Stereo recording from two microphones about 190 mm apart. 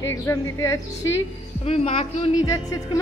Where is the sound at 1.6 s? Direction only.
30° left (ahead or behind).